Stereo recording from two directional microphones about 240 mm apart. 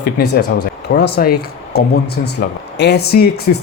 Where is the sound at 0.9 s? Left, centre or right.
Left.